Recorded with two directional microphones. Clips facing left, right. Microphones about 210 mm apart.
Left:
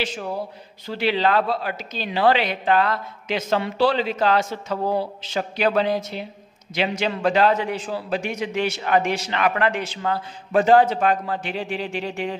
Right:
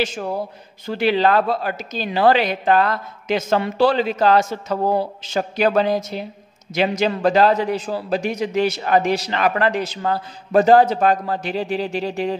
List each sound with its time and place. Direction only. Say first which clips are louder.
0.8 s a woman's voice: right 4 dB; 45° right (ahead or behind)